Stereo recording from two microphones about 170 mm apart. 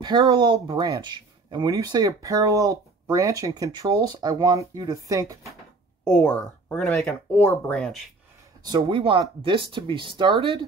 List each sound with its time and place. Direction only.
0.0 s speech: 25° right (ahead or behind)
6.1 s speech: 10° left (ahead or behind)
8.6 s speech: 25° right (ahead or behind)